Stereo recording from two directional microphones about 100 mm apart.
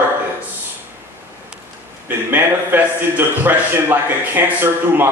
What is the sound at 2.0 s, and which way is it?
A man's voice, 20° right (ahead or behind).